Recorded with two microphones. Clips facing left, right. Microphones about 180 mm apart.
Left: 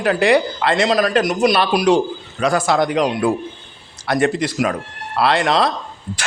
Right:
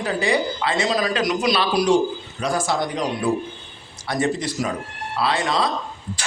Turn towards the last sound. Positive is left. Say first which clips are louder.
# left 5 dB
turn(degrees=70)  # may be behind; listen again after turning